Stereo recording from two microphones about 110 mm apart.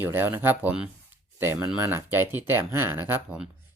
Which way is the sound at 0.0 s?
20° right (ahead or behind).